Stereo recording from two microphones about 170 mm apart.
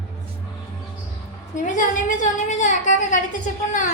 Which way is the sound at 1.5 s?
45° left (ahead or behind).